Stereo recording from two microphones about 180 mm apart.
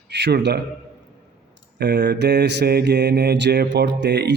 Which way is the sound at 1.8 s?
65° right (ahead or behind).